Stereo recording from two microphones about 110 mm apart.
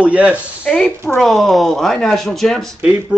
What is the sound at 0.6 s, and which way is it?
Speech, 5° left (ahead or behind).